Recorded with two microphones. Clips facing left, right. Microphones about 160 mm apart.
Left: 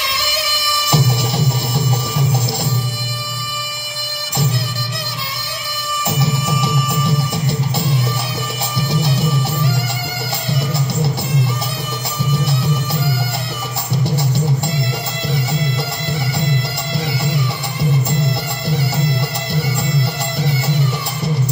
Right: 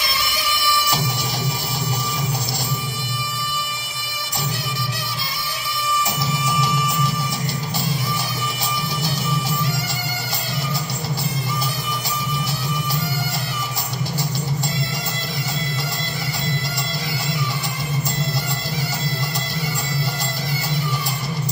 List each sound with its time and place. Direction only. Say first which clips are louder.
0.0 s music: left 3 dB; 70° left (ahead or behind)
6.1 s music: left 4 dB; 70° left (ahead or behind)
14.1 s music: left 5 dB; 70° left (ahead or behind)
16.9 s music: left 10 dB; 65° left (ahead or behind)